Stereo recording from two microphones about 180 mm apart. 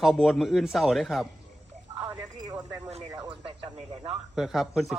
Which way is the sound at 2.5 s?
20° right (ahead or behind).